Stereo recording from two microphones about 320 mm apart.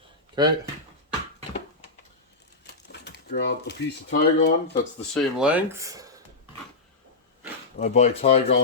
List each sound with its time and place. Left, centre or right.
0.3 s speech: centre
3.0 s speech: left
5.1 s speech: centre
7.8 s speech: left